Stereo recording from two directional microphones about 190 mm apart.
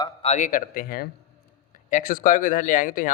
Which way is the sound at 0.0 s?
35° left (ahead or behind).